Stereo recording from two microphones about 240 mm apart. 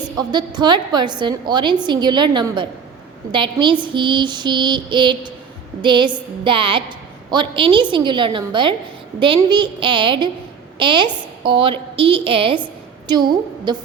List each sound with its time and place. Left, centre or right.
0.2 s a woman's voice: centre